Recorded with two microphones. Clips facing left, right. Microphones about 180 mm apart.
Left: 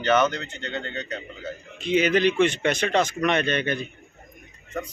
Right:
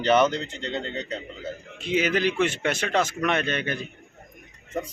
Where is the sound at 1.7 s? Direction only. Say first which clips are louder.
Left 3 dB; 5° right (ahead or behind).